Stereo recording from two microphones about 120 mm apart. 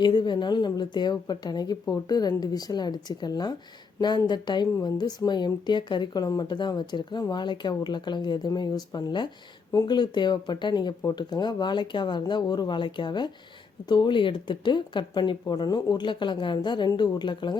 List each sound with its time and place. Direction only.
0.0 s speech: 40° left (ahead or behind)